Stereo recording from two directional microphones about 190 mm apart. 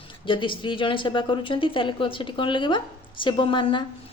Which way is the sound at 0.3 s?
25° left (ahead or behind).